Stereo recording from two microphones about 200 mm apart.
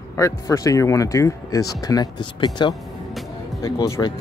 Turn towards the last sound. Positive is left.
turn(degrees=15)  # may be behind; listen again after turning